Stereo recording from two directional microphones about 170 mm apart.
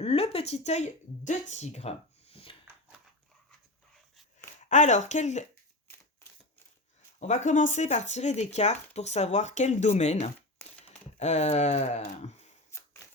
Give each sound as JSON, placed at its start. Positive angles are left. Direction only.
{"t": 0.0, "sound": "speech", "side_deg": 35}
{"t": 4.7, "sound": "speech", "side_deg": 45}
{"t": 7.2, "sound": "speech", "side_deg": 45}
{"t": 12.7, "sound": "a sound", "side_deg": 15}